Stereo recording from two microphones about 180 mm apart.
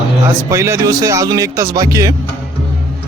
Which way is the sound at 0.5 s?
15° right (ahead or behind).